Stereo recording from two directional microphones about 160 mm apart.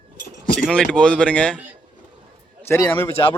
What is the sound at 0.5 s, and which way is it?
Speech, 5° left (ahead or behind).